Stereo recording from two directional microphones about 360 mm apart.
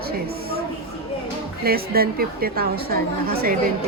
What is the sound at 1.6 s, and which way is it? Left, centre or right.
A woman's voice, right.